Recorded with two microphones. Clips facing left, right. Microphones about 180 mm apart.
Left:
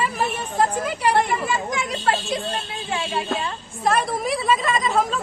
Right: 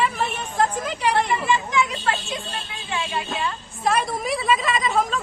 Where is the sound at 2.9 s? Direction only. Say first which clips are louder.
Left 2 dB; 40° left (ahead or behind).